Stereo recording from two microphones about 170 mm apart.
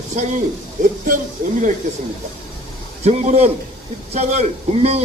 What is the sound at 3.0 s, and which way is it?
A man's voice, 40° right (ahead or behind).